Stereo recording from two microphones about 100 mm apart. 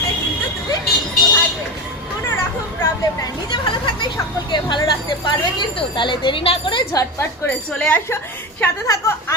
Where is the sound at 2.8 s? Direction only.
35° left (ahead or behind).